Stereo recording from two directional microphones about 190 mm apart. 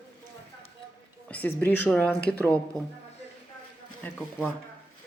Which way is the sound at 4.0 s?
10° left (ahead or behind).